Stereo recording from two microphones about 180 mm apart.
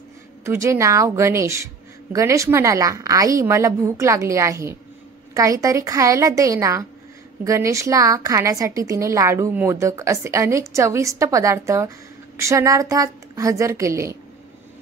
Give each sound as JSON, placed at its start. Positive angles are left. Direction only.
{"t": 0.5, "sound": "a woman's voice", "side_deg": -15}